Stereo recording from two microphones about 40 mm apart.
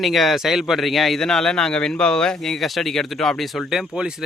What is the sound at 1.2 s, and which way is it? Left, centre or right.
Speech, centre.